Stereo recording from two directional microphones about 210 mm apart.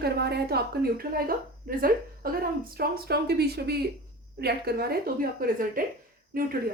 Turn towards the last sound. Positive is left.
turn(degrees=-45)  # may be behind; listen again after turning